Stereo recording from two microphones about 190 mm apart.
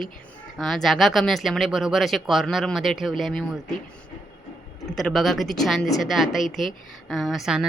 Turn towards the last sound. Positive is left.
turn(degrees=0)  # may be behind; listen again after turning